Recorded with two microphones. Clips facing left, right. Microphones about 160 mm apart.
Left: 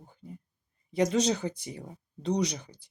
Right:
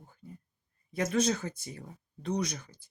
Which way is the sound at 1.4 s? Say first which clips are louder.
Left 5 dB; 15° left (ahead or behind).